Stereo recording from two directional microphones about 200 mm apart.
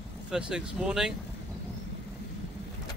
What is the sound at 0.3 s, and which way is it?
Speech, 5° right (ahead or behind).